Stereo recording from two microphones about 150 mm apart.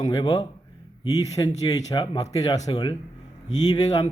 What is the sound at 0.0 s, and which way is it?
Speech, 30° left (ahead or behind).